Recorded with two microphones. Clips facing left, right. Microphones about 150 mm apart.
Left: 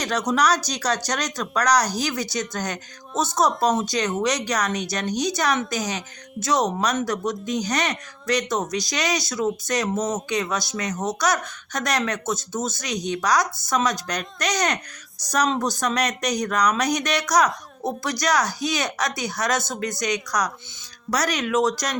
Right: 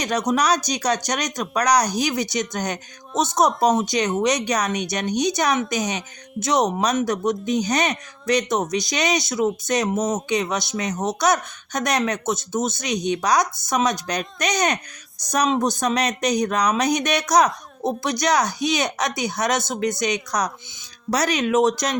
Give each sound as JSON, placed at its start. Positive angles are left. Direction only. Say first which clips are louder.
{"t": 0.0, "sound": "speech", "louder": "right 1 dB", "side_deg": -20}